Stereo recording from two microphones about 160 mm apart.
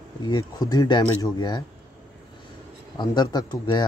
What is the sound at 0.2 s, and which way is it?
Speech, 25° left (ahead or behind).